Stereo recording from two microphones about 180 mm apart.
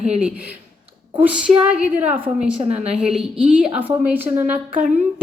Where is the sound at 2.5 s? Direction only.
35° right (ahead or behind).